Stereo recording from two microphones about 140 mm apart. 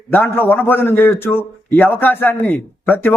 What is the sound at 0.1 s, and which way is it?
A man's voice, 15° left (ahead or behind).